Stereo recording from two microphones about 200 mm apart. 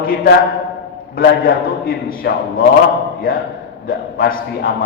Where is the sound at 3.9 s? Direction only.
45° left (ahead or behind).